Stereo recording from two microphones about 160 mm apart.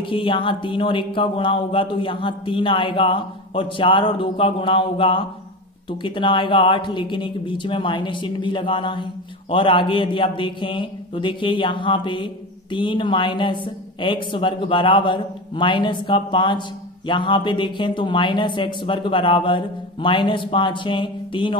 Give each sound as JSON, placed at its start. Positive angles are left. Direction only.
{"t": 0.0, "sound": "speech", "side_deg": 30}